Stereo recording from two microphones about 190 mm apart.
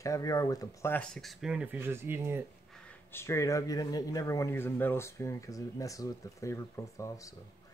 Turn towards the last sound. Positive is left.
turn(degrees=15)  # may be behind; listen again after turning